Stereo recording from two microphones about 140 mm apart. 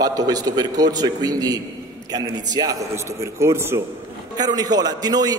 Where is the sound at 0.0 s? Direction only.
25° right (ahead or behind).